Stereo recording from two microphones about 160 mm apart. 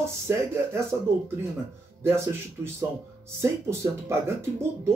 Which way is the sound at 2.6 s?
15° right (ahead or behind).